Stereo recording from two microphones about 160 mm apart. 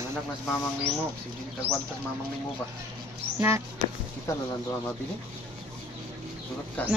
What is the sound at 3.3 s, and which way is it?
Speech, 15° right (ahead or behind).